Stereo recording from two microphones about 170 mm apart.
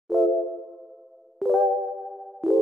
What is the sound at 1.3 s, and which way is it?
Music, centre (ahead or behind).